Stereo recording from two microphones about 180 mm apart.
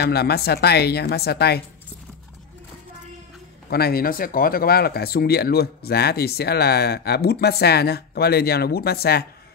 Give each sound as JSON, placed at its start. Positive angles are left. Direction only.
{"t": 0.0, "sound": "speech", "side_deg": 65}
{"t": 3.7, "sound": "speech", "side_deg": 60}